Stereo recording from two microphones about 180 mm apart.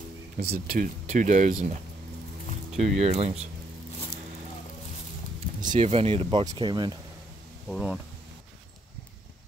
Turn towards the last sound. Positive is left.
turn(degrees=-5)  # may be behind; listen again after turning